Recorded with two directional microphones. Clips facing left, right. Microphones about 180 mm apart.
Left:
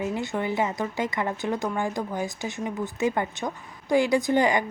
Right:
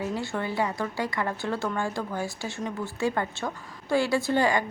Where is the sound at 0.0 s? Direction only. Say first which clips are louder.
Left 2 dB; 20° left (ahead or behind).